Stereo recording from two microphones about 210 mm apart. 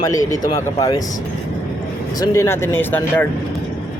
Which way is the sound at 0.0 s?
15° left (ahead or behind).